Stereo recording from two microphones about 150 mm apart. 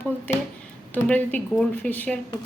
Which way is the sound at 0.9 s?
10° left (ahead or behind).